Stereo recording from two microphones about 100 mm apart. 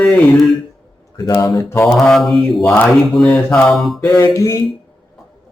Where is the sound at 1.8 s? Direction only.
Centre (ahead or behind).